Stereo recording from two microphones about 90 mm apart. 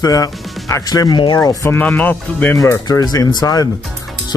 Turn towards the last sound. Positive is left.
turn(degrees=40)  # may be behind; listen again after turning